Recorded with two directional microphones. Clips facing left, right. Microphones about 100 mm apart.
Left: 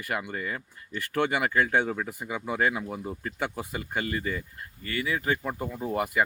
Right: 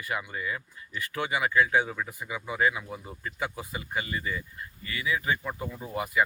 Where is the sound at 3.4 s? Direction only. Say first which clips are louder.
Left 2 dB; 60° left (ahead or behind).